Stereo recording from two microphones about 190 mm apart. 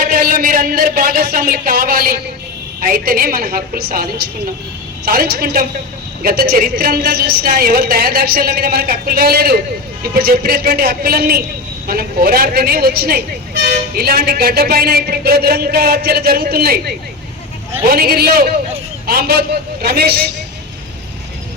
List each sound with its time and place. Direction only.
0.0 s a woman's voice: 50° right (ahead or behind)